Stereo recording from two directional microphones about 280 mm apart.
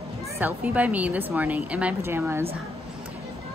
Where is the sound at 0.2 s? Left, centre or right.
Centre.